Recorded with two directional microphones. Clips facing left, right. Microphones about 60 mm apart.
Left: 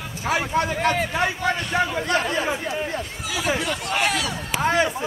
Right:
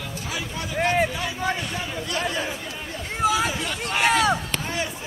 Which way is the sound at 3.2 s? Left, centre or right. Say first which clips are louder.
Right 12 dB; right.